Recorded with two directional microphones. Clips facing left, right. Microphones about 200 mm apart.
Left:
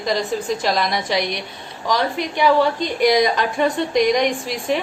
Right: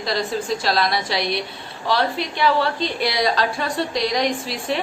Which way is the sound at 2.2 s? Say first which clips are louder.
Left 3 dB; 15° left (ahead or behind).